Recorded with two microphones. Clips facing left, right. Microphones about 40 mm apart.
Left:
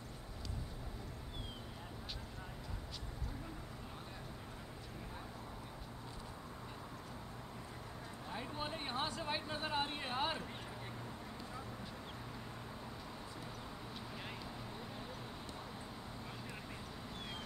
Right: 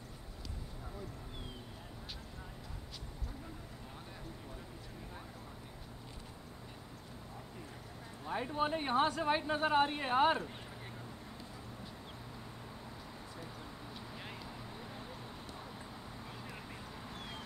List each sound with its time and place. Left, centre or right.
8.3 s speech: right